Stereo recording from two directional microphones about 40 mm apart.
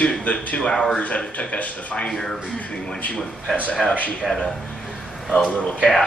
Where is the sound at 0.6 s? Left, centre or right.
Centre.